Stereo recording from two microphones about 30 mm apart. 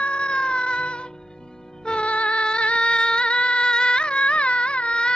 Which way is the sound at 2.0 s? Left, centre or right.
Left.